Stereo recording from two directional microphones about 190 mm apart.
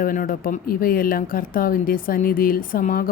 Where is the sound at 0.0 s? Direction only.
45° left (ahead or behind).